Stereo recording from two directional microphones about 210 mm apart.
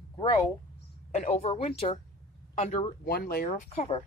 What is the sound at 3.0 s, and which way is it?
Speech, 45° left (ahead or behind).